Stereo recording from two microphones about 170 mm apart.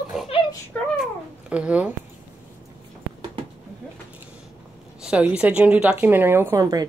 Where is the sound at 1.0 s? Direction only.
5° right (ahead or behind).